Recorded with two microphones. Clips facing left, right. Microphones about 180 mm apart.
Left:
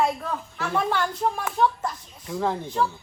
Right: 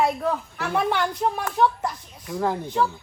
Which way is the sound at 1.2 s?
10° right (ahead or behind).